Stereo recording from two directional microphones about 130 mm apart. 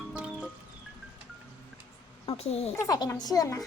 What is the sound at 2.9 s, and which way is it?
Speech, 30° left (ahead or behind).